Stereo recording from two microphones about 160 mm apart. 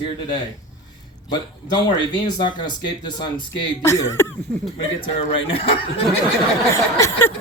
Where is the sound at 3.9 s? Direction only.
15° left (ahead or behind).